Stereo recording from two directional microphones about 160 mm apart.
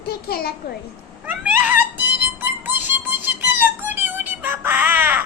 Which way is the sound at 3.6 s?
15° right (ahead or behind).